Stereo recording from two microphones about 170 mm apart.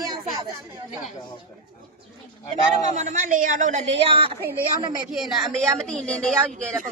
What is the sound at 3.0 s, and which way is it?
A woman's voice, 45° right (ahead or behind).